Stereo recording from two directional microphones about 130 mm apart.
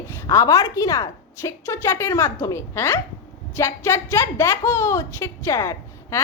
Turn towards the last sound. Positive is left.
turn(degrees=20)  # may be behind; listen again after turning